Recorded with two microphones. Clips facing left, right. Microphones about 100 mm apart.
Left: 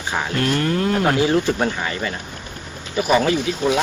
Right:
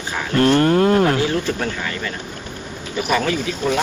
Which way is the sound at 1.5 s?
30° left (ahead or behind).